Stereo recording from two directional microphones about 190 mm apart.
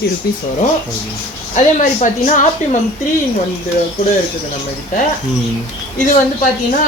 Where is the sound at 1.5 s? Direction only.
40° left (ahead or behind).